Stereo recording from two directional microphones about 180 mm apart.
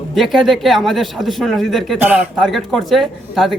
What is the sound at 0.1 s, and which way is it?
A man's voice, centre (ahead or behind).